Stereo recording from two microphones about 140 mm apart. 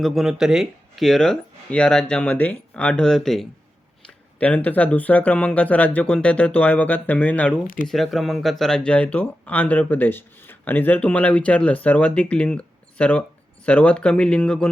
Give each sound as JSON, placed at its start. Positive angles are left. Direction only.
{"t": 0.0, "sound": "speech", "side_deg": 0}